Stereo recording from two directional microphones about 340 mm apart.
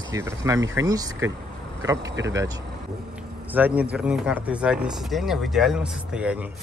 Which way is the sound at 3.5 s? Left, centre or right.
Centre.